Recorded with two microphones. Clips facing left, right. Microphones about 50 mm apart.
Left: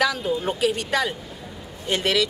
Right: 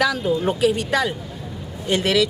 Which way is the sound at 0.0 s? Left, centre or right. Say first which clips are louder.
Right 3 dB; centre.